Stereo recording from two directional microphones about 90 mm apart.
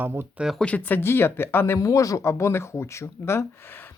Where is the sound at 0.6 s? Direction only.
15° left (ahead or behind).